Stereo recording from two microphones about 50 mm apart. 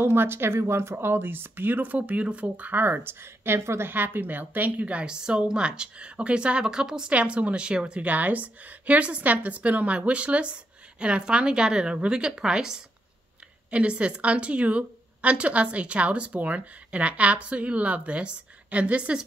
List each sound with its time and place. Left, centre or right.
0.0 s speech: right
3.9 s a woman's voice: right
5.1 s a woman's voice: centre
8.0 s a woman's voice: right